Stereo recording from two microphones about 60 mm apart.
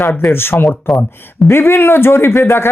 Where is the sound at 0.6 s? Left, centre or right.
Centre.